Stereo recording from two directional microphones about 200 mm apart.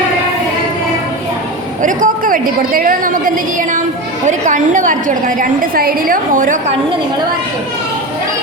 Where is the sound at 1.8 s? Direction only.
40° right (ahead or behind).